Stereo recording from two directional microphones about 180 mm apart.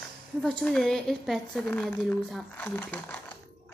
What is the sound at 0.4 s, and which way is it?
A woman's voice, centre (ahead or behind).